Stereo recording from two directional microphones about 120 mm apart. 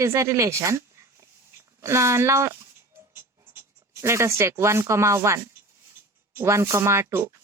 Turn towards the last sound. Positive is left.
turn(degrees=-20)  # may be behind; listen again after turning